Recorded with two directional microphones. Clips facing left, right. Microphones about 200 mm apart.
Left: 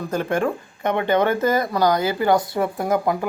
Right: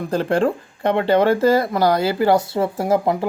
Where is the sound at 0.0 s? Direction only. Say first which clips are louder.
Right 3 dB; 30° right (ahead or behind).